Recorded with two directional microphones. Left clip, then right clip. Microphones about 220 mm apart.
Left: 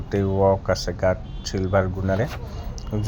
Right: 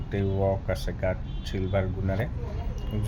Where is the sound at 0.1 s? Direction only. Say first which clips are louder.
Left 8 dB; 20° left (ahead or behind).